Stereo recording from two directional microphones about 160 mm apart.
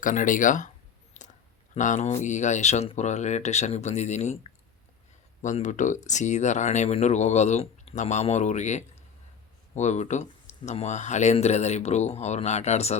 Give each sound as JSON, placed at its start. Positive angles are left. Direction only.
{"t": 0.0, "sound": "speech", "side_deg": 55}
{"t": 1.2, "sound": "a sound", "side_deg": 50}
{"t": 1.7, "sound": "speech", "side_deg": 45}
{"t": 5.4, "sound": "speech", "side_deg": 50}